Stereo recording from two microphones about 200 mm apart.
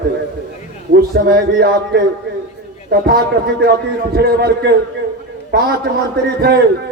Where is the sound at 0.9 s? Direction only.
50° right (ahead or behind).